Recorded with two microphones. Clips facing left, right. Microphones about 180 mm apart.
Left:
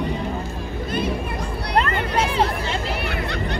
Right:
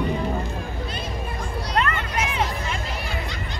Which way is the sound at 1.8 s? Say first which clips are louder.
Left 4 dB; 30° left (ahead or behind).